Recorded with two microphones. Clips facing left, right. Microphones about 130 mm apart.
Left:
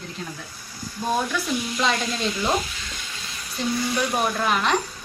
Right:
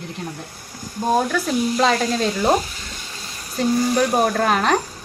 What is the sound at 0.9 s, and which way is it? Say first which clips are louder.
Speech: right 5 dB; 45° right (ahead or behind).